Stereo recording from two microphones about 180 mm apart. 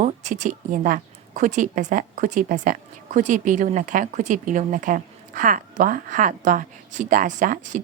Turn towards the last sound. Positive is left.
turn(degrees=-45)  # may be behind; listen again after turning